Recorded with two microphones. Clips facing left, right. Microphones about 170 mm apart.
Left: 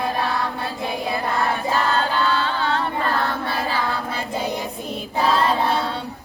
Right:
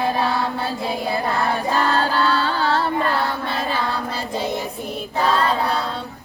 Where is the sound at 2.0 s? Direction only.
35° right (ahead or behind).